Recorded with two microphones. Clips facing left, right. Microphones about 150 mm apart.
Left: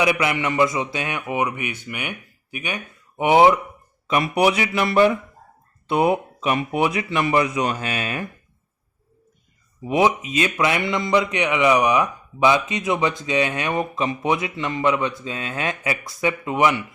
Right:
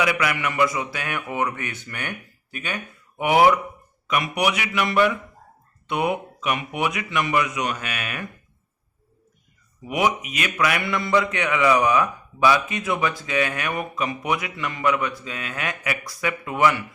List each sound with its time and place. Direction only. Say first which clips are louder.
0.0 s a man's voice: left 3 dB; 25° left (ahead or behind)
9.8 s a man's voice: left 4 dB; 25° left (ahead or behind)